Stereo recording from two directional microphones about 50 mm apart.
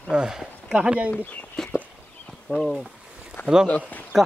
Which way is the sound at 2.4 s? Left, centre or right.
Centre.